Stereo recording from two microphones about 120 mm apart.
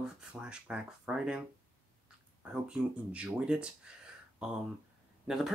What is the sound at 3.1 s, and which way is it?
Speech, 10° right (ahead or behind).